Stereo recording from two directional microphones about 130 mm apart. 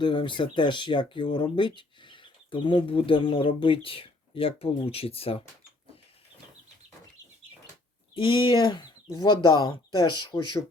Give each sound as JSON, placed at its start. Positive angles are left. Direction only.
{"t": 0.0, "sound": "speech", "side_deg": 40}
{"t": 8.1, "sound": "speech", "side_deg": 40}